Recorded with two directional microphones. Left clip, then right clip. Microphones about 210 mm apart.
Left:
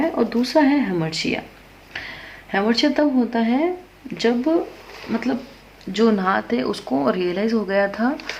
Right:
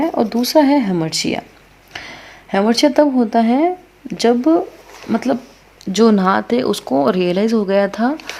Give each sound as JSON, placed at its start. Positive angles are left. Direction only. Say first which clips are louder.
{"t": 0.0, "sound": "speech", "louder": "right 3 dB", "side_deg": -50}